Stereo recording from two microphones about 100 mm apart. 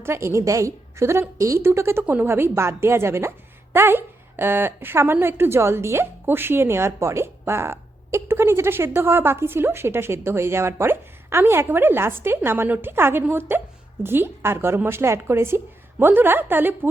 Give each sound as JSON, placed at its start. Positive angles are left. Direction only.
{"t": 0.0, "sound": "speech", "side_deg": -25}